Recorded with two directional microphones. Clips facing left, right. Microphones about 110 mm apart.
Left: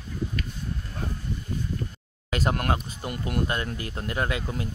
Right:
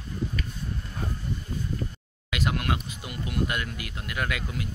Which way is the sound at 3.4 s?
35° left (ahead or behind).